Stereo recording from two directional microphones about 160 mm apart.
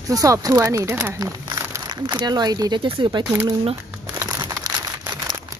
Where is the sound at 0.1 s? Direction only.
20° right (ahead or behind).